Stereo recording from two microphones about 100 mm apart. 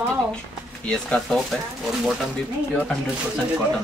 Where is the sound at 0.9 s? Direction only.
5° left (ahead or behind).